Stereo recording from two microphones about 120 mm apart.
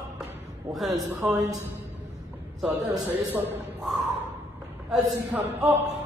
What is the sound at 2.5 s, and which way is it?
Speech, 5° right (ahead or behind).